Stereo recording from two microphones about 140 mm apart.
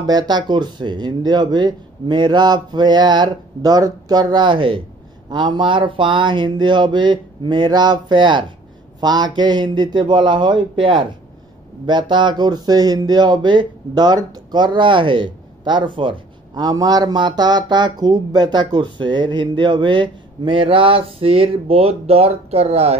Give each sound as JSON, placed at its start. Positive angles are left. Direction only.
{"t": 0.0, "sound": "speech", "side_deg": -30}